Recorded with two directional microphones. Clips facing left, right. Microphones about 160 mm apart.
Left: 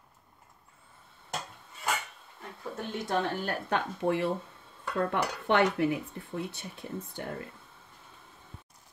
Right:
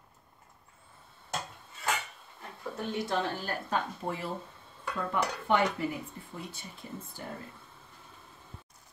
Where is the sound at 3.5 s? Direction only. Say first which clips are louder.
Left 2 dB; 70° left (ahead or behind).